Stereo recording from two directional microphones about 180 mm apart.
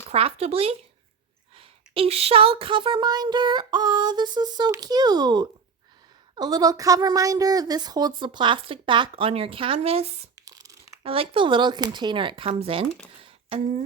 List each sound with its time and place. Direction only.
0.1 s speech: 35° right (ahead or behind)
10.3 s tearing: 20° right (ahead or behind)
11.0 s speech: 30° right (ahead or behind)
13.2 s a sound: 30° right (ahead or behind)